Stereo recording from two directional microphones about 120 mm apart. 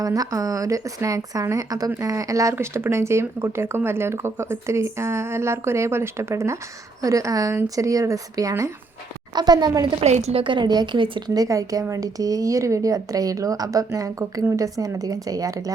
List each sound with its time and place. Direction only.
0.0 s a woman's voice: 30° right (ahead or behind)
10.0 s a woman's voice: 65° right (ahead or behind)
10.4 s a woman's voice: 40° right (ahead or behind)
11.3 s speech: 30° right (ahead or behind)